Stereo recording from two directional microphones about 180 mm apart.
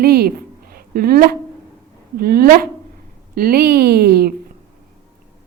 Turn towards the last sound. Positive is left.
turn(degrees=-60)  # may be behind; listen again after turning